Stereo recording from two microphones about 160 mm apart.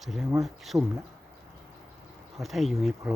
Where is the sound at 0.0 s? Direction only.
Centre (ahead or behind).